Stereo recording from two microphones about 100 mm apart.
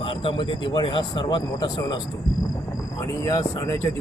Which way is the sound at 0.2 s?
65° left (ahead or behind).